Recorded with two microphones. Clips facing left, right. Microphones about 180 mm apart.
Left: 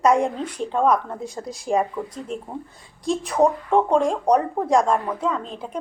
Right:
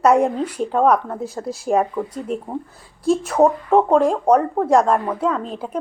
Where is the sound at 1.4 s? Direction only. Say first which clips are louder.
Right 6 dB; 55° right (ahead or behind).